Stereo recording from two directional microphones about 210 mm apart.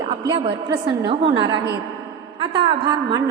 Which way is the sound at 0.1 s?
20° right (ahead or behind).